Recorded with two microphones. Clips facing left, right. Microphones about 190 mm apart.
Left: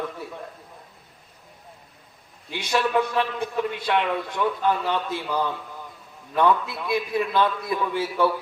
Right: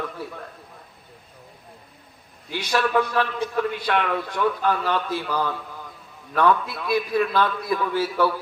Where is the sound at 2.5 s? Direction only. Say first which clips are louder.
Right 1 dB; 25° left (ahead or behind).